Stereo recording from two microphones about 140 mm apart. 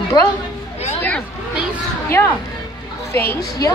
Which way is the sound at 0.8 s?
10° left (ahead or behind).